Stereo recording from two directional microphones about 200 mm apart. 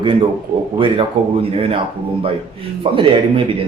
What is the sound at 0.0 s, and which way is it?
Speech, 25° right (ahead or behind).